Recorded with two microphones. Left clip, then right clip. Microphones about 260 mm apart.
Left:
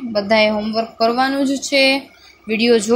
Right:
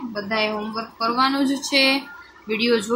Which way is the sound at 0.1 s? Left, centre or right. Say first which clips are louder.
Left 9 dB; left.